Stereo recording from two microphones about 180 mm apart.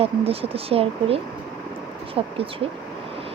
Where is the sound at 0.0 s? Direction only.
30° right (ahead or behind).